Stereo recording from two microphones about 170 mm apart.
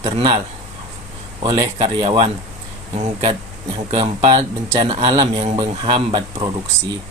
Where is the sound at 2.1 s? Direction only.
35° right (ahead or behind).